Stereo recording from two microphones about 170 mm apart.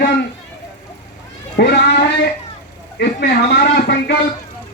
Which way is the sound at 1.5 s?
80° left.